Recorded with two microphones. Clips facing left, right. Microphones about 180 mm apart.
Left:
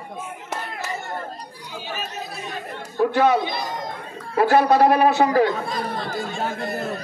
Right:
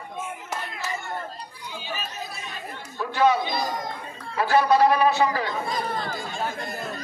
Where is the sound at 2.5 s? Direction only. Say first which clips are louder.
Left 5 dB; 55° left (ahead or behind).